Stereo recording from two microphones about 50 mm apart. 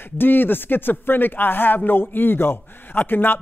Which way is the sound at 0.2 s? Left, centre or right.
Left.